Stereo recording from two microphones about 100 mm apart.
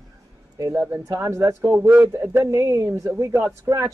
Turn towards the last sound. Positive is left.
turn(degrees=-25)  # may be behind; listen again after turning